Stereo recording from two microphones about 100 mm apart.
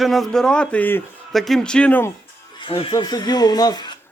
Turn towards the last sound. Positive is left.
turn(degrees=40)  # may be behind; listen again after turning